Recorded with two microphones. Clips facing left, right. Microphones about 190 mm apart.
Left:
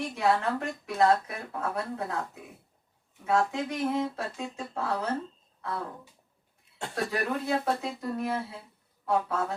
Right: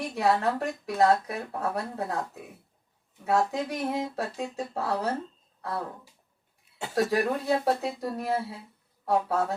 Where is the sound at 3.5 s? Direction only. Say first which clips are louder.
Even; 35° right (ahead or behind).